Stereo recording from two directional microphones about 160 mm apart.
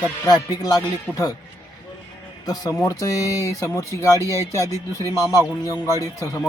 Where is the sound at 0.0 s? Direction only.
25° left (ahead or behind).